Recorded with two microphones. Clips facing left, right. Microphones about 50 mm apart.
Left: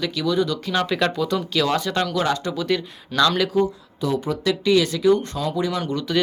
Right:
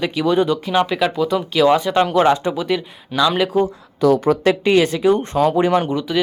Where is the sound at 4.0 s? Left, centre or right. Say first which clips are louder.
Right 9 dB; right.